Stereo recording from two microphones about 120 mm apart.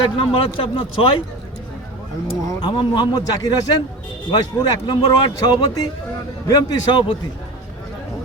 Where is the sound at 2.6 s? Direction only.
40° left (ahead or behind).